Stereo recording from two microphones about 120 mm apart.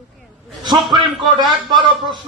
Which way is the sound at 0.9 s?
40° right (ahead or behind).